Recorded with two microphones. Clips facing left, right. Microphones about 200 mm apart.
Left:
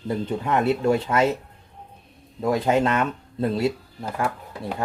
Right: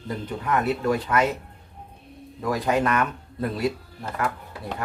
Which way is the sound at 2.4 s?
25° left (ahead or behind).